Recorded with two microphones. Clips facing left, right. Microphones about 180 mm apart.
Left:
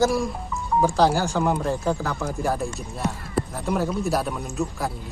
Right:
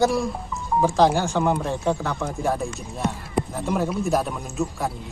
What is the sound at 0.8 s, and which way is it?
Speech, 5° left (ahead or behind).